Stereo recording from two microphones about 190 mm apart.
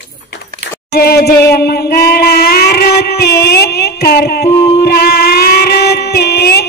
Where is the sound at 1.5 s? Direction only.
55° left (ahead or behind).